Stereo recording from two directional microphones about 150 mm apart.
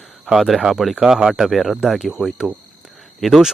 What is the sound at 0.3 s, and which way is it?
Speech, 5° right (ahead or behind).